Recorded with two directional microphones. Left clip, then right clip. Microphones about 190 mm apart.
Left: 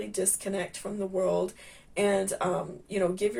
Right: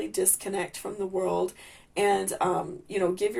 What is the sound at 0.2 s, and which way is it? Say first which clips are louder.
Speech: right 1 dB; 40° right (ahead or behind).